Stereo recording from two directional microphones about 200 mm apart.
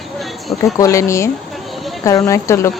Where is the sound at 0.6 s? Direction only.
15° left (ahead or behind).